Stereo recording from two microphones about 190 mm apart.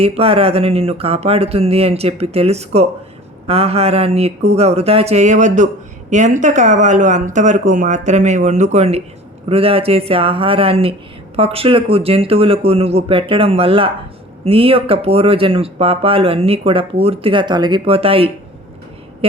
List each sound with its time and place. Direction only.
0.0 s speech: 30° right (ahead or behind)